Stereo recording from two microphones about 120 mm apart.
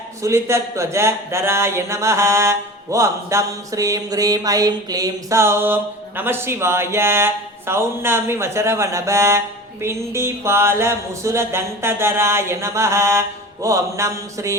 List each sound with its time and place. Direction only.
0.2 s speech: 25° right (ahead or behind)